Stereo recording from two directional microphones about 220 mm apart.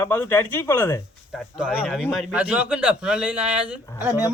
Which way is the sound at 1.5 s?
5° right (ahead or behind).